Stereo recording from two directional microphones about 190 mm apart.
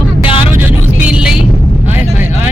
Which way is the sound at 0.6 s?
5° right (ahead or behind).